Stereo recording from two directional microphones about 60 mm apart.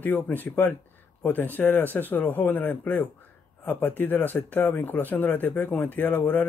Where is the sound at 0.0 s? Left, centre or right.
Left.